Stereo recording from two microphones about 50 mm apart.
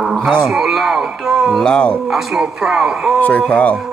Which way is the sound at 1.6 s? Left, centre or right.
Centre.